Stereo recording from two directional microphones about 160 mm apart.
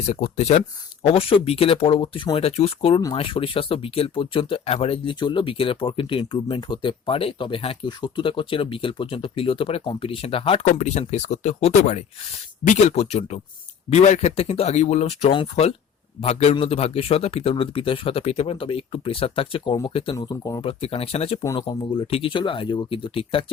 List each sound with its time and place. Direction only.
0.0 s speech: 45° left (ahead or behind)
20.1 s speech: 20° left (ahead or behind)
20.6 s speech: 35° left (ahead or behind)
21.4 s speech: 25° left (ahead or behind)